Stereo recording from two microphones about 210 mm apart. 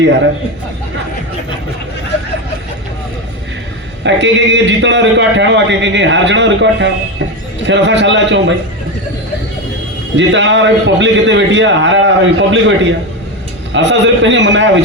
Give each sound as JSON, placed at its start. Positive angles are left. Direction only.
{"t": 0.0, "sound": "a man's voice", "side_deg": -60}
{"t": 4.0, "sound": "a man's voice", "side_deg": -60}
{"t": 10.2, "sound": "a man's voice", "side_deg": -60}